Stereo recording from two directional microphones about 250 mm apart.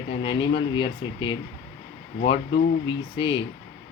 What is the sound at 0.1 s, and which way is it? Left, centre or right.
Speech, centre.